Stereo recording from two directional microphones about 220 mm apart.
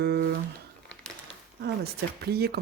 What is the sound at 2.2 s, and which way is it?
Speech, 45° right (ahead or behind).